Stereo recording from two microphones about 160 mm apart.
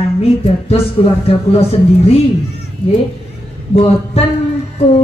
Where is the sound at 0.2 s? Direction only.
40° left (ahead or behind).